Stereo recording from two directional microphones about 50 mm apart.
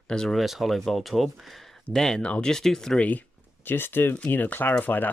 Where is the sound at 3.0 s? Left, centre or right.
Left.